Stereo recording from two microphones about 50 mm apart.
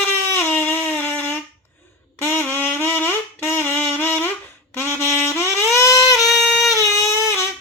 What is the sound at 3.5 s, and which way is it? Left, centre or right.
Wind instrument, left.